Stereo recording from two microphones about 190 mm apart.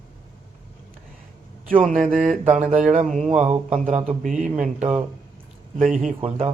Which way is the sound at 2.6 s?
5° right (ahead or behind).